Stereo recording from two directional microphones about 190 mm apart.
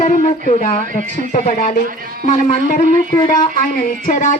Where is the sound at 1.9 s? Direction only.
45° right (ahead or behind).